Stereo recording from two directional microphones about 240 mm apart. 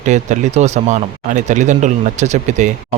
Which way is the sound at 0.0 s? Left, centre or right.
Right.